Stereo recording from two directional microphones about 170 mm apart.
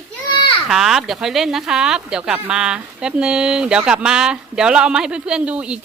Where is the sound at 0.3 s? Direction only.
25° left (ahead or behind).